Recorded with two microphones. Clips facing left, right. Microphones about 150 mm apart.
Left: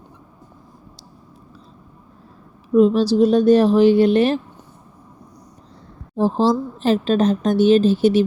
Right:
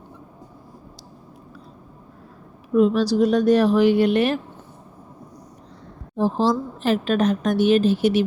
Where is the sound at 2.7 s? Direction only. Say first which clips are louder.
Left 3 dB; 30° left (ahead or behind).